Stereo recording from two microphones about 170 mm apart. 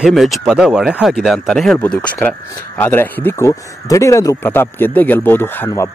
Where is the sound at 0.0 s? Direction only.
Centre (ahead or behind).